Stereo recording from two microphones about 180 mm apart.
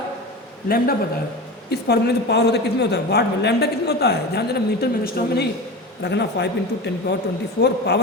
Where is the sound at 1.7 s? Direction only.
65° left (ahead or behind).